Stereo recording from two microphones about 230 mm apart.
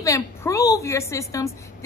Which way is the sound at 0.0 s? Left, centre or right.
Centre.